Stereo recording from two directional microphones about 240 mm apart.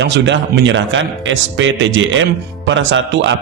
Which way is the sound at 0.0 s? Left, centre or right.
Right.